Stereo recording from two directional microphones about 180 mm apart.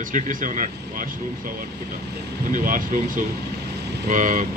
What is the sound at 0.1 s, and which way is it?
Speech, 45° right (ahead or behind).